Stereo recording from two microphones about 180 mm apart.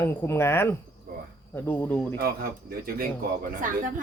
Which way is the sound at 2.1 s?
60° right (ahead or behind).